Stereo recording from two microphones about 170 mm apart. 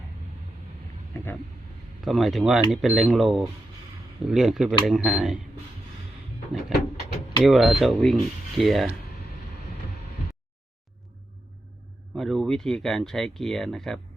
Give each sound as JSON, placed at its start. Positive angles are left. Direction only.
{"t": 1.1, "sound": "speech", "side_deg": 10}
{"t": 2.0, "sound": "speech", "side_deg": 0}
{"t": 6.5, "sound": "speech", "side_deg": 0}
{"t": 12.1, "sound": "speech", "side_deg": 0}